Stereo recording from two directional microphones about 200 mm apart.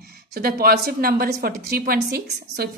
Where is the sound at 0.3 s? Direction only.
50° right (ahead or behind).